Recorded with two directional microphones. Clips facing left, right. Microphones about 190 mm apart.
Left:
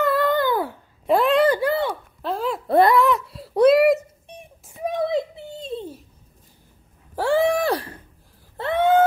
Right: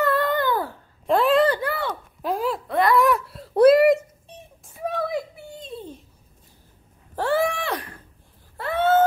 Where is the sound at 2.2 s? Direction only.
15° right (ahead or behind).